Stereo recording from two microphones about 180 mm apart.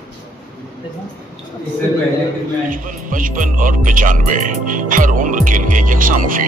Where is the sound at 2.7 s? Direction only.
45° right (ahead or behind).